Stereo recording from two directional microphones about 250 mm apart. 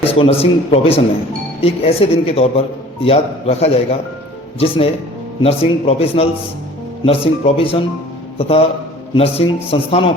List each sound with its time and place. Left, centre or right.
0.0 s a man's voice: left
5.4 s a man's voice: left